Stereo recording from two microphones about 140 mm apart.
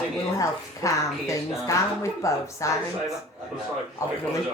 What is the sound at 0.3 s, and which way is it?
Speech, 25° left (ahead or behind).